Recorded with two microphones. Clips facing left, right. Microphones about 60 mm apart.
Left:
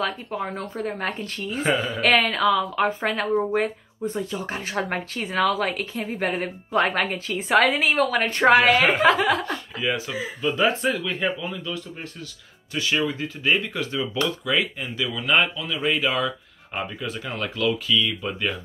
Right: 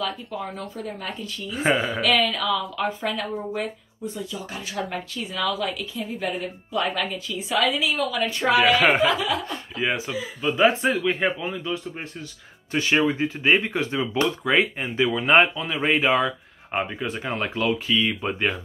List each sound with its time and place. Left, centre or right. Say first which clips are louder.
0.0 s speech: left 2 dB; left
1.7 s speech: right 2 dB; right
2.0 s speech: left 2 dB; left
9.8 s speech: right 2 dB; right